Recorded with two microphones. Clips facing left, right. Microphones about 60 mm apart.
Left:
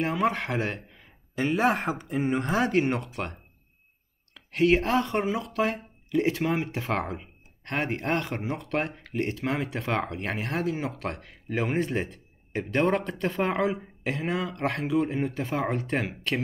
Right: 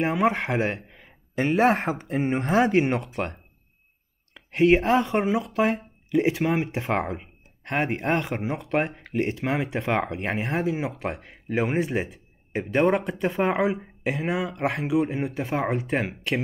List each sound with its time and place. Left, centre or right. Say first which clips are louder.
0.0 s speech: right 3 dB; centre